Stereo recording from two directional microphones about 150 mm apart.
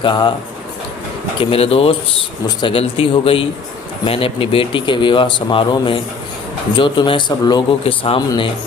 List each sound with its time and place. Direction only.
0.0 s speech: 30° left (ahead or behind)
1.4 s speech: 40° left (ahead or behind)